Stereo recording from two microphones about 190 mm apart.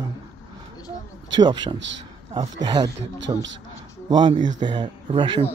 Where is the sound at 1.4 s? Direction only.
20° right (ahead or behind).